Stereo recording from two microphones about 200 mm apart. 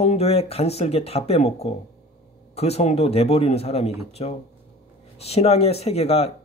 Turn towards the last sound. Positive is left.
turn(degrees=30)  # may be behind; listen again after turning